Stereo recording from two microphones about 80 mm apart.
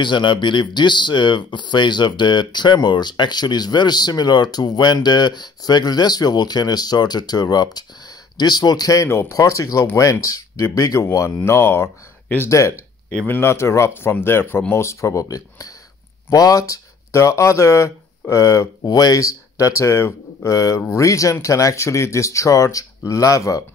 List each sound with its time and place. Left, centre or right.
0.0 s speech: left
18.9 s speech: left
20.5 s speech: left